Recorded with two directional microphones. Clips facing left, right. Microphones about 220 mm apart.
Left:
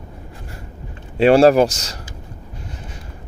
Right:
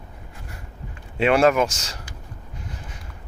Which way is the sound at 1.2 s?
35° left (ahead or behind).